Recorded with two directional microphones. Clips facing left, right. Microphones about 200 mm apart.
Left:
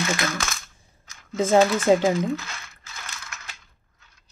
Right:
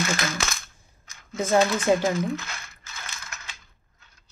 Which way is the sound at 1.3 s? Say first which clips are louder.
Left 3 dB; 25° left (ahead or behind).